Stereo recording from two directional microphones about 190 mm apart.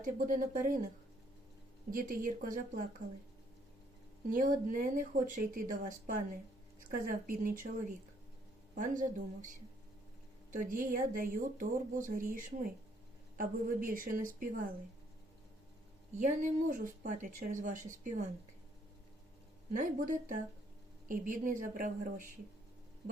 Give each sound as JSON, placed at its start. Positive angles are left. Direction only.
{"t": 0.0, "sound": "speech", "side_deg": -45}
{"t": 1.9, "sound": "speech", "side_deg": -45}
{"t": 4.3, "sound": "speech", "side_deg": -45}
{"t": 8.7, "sound": "speech", "side_deg": -45}
{"t": 16.1, "sound": "speech", "side_deg": -40}
{"t": 19.7, "sound": "speech", "side_deg": -40}